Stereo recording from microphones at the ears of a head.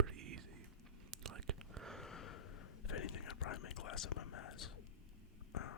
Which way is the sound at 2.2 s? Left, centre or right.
Left.